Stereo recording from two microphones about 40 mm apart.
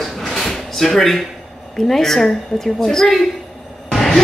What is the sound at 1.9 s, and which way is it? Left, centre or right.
A woman's voice, centre.